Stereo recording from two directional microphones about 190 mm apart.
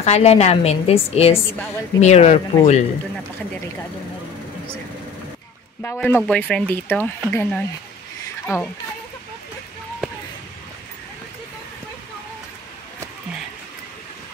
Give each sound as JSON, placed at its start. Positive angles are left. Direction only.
{"t": 0.0, "sound": "a woman's voice", "side_deg": 35}
{"t": 5.8, "sound": "speech", "side_deg": 10}